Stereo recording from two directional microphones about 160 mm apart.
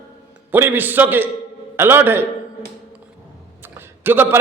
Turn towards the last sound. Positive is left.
turn(degrees=-15)  # may be behind; listen again after turning